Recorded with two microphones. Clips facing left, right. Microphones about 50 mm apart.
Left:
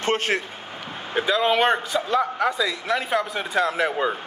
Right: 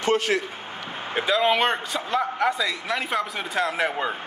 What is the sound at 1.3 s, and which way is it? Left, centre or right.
A man's voice, centre.